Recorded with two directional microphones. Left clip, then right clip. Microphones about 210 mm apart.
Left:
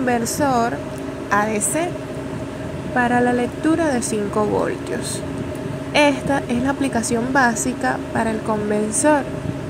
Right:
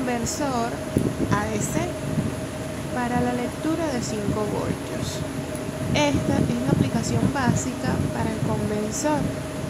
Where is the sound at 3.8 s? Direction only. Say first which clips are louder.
Left 6 dB; 25° left (ahead or behind).